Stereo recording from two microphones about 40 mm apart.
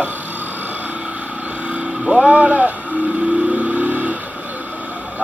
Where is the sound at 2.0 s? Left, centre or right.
Centre.